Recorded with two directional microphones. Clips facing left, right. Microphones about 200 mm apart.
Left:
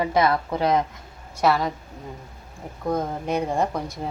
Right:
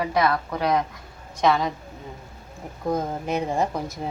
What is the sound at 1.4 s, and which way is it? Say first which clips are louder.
Speech: even; 5° left (ahead or behind).